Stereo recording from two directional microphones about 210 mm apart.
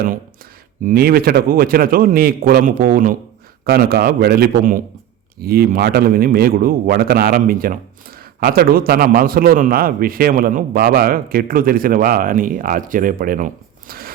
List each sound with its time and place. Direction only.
0.9 s a man's voice: 45° right (ahead or behind)